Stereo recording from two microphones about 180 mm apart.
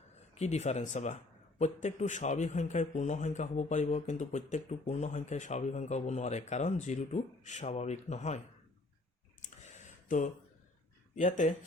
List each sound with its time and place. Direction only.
0.3 s speech: 40° left (ahead or behind)
9.4 s a sound: 45° left (ahead or behind)
11.1 s speech: 45° left (ahead or behind)